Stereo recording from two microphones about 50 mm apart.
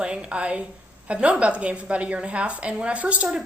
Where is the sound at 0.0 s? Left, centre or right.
Centre.